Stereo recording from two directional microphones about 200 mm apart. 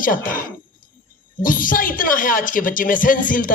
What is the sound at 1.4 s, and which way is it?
A woman's voice, 45° left (ahead or behind).